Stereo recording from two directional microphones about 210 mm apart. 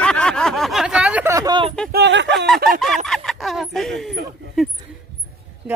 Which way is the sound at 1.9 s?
55° right (ahead or behind).